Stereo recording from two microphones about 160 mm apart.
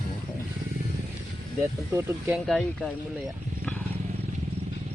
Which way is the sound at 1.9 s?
15° right (ahead or behind).